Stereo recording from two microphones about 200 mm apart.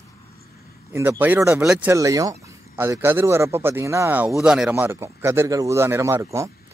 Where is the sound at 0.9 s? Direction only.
10° right (ahead or behind).